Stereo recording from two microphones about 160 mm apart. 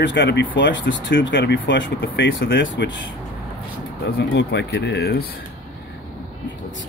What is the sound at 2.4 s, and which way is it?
Speech, 90° left.